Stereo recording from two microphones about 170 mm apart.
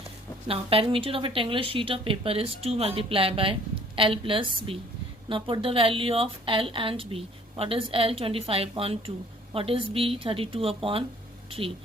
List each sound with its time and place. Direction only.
0.4 s speech: 35° right (ahead or behind)